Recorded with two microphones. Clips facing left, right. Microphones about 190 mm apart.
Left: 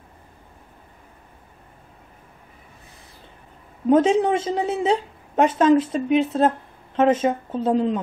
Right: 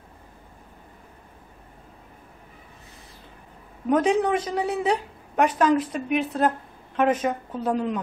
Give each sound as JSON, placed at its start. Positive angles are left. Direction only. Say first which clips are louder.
{"t": 3.8, "sound": "a woman's voice", "louder": "left 4 dB", "side_deg": 25}